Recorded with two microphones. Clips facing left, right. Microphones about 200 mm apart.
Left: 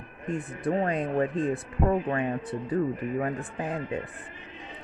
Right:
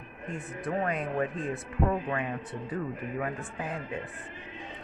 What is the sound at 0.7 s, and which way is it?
A man's voice, 30° left (ahead or behind).